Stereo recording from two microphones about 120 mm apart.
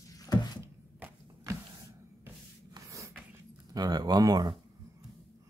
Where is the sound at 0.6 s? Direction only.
25° right (ahead or behind).